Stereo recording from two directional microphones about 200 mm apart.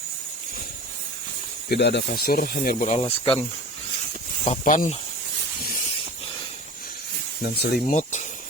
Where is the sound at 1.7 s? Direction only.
60° left (ahead or behind); by 3.3 s 30° left (ahead or behind).